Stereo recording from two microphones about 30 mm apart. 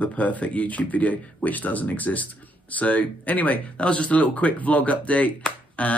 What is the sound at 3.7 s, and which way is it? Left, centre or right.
Speech, left.